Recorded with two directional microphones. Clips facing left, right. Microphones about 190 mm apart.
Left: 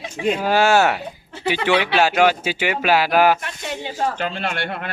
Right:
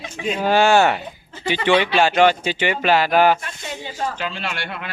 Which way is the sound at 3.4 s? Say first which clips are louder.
Left 3 dB; 65° left (ahead or behind).